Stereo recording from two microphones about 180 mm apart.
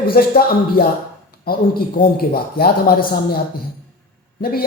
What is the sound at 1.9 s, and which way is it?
A man's voice, 55° left (ahead or behind).